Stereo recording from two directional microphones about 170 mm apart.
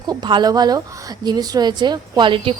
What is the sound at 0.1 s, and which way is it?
A woman's voice, 25° right (ahead or behind).